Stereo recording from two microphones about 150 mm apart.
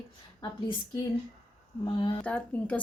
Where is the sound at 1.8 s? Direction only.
30° left (ahead or behind).